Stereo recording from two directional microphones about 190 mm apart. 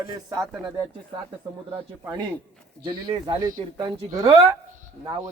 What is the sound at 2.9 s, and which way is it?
Speech, 20° right (ahead or behind).